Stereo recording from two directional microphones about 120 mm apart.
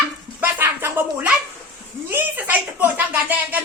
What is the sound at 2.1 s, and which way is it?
Speech, 15° right (ahead or behind).